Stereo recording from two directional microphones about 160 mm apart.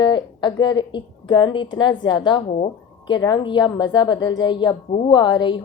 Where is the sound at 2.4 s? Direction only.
45° left (ahead or behind).